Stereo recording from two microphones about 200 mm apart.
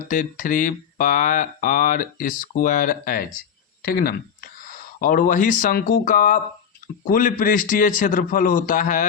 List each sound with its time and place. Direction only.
0.1 s a man's voice: 40° left (ahead or behind)